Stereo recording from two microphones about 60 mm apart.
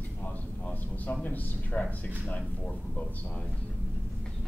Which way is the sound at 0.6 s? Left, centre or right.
Left.